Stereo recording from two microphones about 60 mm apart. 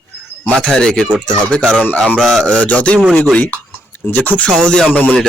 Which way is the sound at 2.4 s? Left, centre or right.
Left.